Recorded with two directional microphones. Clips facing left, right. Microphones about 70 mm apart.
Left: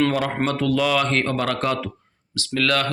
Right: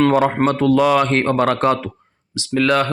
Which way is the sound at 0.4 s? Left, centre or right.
Right.